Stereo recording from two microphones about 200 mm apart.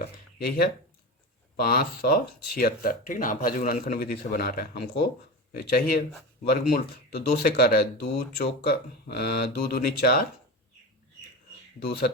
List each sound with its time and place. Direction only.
0.0 s a sound: 50° left (ahead or behind)
1.5 s speech: 50° left (ahead or behind)
11.8 s speech: 50° left (ahead or behind)